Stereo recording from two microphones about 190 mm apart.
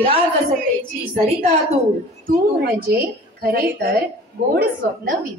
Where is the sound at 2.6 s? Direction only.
55° right (ahead or behind).